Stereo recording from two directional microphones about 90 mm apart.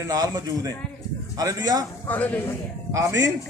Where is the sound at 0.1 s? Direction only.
40° right (ahead or behind).